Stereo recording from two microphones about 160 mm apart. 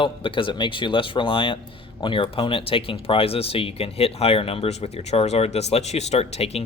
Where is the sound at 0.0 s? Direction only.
30° left (ahead or behind).